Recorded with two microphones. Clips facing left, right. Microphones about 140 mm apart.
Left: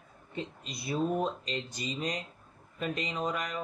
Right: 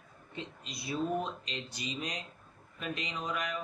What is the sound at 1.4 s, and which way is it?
Speech, 45° left (ahead or behind).